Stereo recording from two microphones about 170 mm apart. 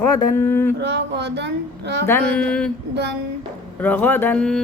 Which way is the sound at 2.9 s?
90° right.